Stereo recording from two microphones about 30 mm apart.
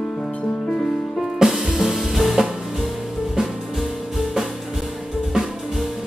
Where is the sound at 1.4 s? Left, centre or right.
Centre.